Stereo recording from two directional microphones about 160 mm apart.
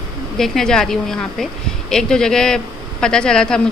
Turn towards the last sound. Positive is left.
turn(degrees=5)  # may be behind; listen again after turning